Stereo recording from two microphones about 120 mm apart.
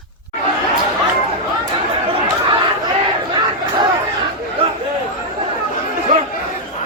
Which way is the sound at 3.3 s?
40° right (ahead or behind).